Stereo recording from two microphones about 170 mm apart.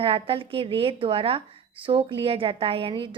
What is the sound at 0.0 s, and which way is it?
A woman's voice, 35° right (ahead or behind).